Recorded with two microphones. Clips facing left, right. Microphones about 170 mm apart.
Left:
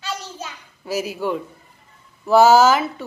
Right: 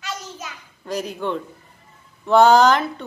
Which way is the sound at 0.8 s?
5° left (ahead or behind).